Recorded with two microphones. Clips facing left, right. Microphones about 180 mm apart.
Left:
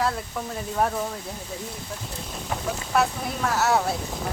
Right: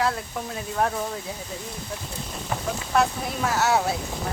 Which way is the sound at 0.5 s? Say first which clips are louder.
Even; centre (ahead or behind).